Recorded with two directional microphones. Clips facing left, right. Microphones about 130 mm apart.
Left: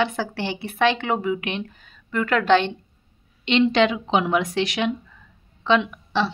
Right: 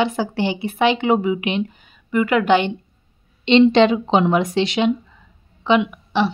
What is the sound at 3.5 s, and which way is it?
A woman's voice, 25° right (ahead or behind).